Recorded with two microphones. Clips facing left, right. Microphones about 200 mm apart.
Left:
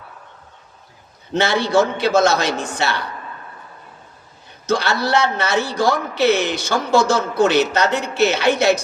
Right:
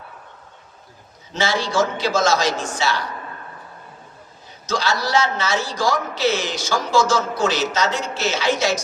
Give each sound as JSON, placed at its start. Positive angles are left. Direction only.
{"t": 1.3, "sound": "a man's voice", "side_deg": 60}
{"t": 4.6, "sound": "a man's voice", "side_deg": 60}